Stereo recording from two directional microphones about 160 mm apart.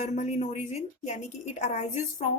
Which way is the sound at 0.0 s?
45° left (ahead or behind).